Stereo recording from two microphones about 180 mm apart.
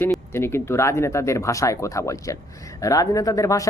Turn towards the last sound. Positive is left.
turn(degrees=20)  # may be behind; listen again after turning